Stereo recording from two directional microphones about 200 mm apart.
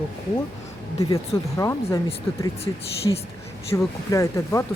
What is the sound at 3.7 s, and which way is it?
Speech, 15° left (ahead or behind).